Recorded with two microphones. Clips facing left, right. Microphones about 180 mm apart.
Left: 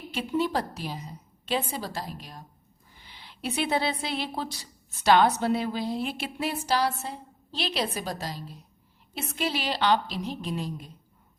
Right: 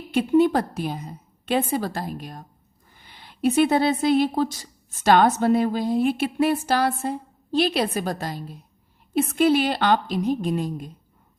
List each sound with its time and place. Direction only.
0.1 s speech: 55° right (ahead or behind)